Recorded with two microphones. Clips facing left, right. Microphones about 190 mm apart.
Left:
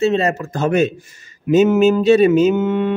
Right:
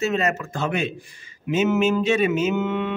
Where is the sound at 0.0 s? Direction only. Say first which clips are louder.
Left 6 dB; 30° left (ahead or behind).